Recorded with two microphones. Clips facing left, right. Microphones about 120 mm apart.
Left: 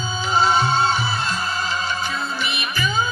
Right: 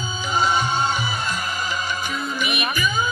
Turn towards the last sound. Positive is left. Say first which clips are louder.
# even
turn(degrees=-15)  # may be behind; listen again after turning